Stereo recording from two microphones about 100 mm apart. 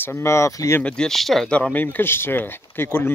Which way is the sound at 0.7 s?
10° left (ahead or behind).